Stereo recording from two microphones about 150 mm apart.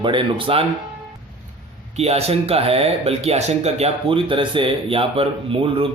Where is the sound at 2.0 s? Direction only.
45° right (ahead or behind).